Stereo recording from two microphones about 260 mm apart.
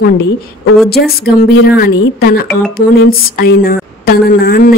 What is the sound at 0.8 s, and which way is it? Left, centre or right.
Speech, left.